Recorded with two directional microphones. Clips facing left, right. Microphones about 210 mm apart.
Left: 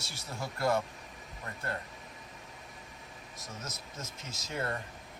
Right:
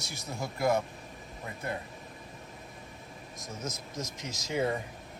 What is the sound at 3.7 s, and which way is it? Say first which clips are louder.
Speech: right 6 dB; 90° right.